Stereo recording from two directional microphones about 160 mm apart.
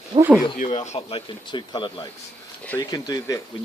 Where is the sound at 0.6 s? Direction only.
45° left (ahead or behind); by 3.4 s 25° left (ahead or behind).